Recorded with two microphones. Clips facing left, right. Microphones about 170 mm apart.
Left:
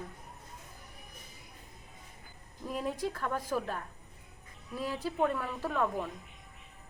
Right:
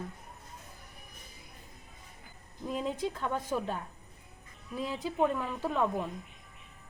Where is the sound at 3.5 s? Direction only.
25° right (ahead or behind).